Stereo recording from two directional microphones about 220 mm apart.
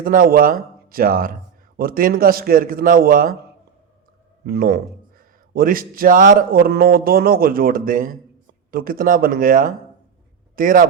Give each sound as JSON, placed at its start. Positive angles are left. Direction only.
{"t": 0.0, "sound": "a man's voice", "side_deg": -40}
{"t": 4.4, "sound": "a man's voice", "side_deg": -45}